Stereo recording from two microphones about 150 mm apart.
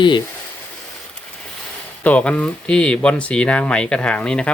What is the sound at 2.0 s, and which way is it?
Speech, 10° left (ahead or behind).